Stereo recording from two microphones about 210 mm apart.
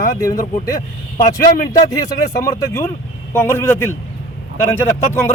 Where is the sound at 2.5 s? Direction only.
15° left (ahead or behind).